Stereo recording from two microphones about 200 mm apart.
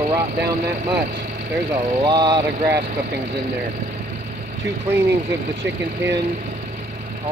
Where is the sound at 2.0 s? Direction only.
20° right (ahead or behind).